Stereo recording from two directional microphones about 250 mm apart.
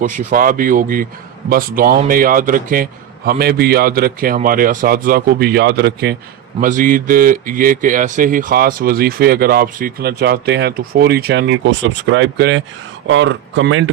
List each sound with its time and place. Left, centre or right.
0.0 s speech: right